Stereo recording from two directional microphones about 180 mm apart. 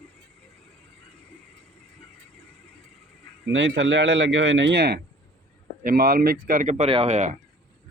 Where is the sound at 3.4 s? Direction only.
90° right; by 4.9 s 70° right (ahead or behind).